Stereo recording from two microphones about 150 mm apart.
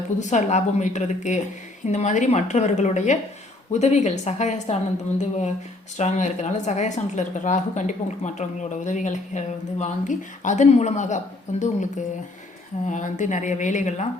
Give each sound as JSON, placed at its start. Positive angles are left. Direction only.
{"t": 0.2, "sound": "speech", "side_deg": 50}
{"t": 12.9, "sound": "speech", "side_deg": 55}